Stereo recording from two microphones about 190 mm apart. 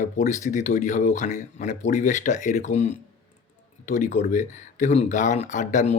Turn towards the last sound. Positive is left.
turn(degrees=40)  # may be behind; listen again after turning